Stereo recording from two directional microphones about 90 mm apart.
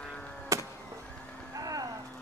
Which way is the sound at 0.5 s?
35° right (ahead or behind).